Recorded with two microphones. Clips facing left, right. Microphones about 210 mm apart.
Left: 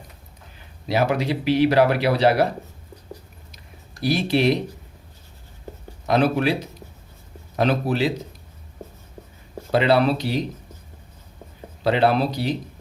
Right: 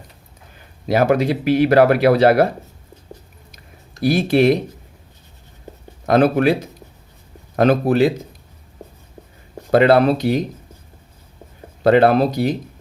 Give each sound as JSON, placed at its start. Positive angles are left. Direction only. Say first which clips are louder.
{"t": 0.9, "sound": "speech", "louder": "right 6 dB", "side_deg": -50}
{"t": 4.0, "sound": "speech", "louder": "right 5 dB", "side_deg": -50}
{"t": 6.1, "sound": "speech", "louder": "right 5 dB", "side_deg": -50}
{"t": 9.7, "sound": "speech", "louder": "right 5 dB", "side_deg": -50}
{"t": 11.8, "sound": "speech", "louder": "right 6 dB", "side_deg": -50}